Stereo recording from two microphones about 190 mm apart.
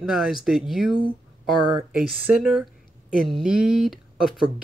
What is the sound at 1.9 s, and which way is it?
Speech, 5° right (ahead or behind).